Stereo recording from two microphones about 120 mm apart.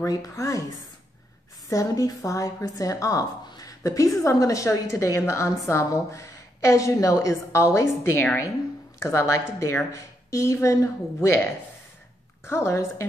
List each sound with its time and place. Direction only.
0.0 s a woman's voice: 30° left (ahead or behind)
1.7 s a woman's voice: 30° left (ahead or behind)
12.4 s a woman's voice: 25° left (ahead or behind)